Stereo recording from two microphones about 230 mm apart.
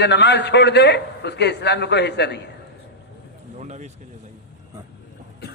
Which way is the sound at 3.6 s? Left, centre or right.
Right.